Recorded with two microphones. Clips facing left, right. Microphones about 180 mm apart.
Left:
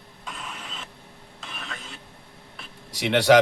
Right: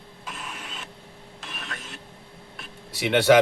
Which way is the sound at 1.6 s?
Centre (ahead or behind).